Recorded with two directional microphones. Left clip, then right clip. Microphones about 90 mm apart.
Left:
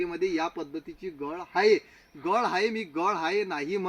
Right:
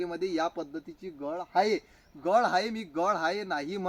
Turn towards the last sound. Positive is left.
turn(degrees=-30)  # may be behind; listen again after turning